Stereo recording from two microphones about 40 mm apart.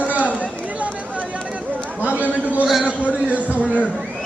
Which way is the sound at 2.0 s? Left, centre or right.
Right.